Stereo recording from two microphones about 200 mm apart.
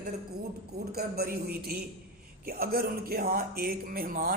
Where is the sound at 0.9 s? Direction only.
50° right (ahead or behind).